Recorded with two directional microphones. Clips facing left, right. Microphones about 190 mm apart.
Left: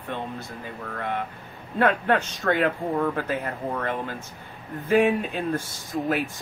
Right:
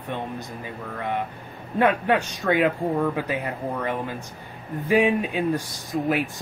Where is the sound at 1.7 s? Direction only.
15° right (ahead or behind).